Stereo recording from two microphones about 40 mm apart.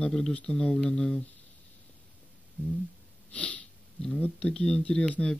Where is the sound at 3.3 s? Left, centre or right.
Left.